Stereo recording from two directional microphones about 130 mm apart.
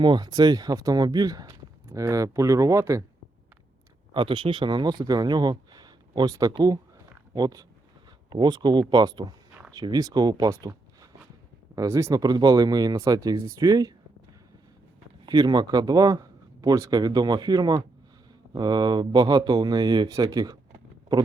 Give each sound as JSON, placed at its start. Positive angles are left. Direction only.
{"t": 0.0, "sound": "speech", "side_deg": -35}
{"t": 4.1, "sound": "speech", "side_deg": -40}
{"t": 15.3, "sound": "speech", "side_deg": -35}